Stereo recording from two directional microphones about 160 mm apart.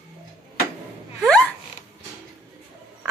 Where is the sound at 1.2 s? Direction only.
5° left (ahead or behind).